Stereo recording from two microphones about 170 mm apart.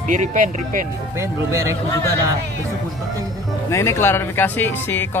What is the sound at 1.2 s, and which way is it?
Speech, 15° right (ahead or behind).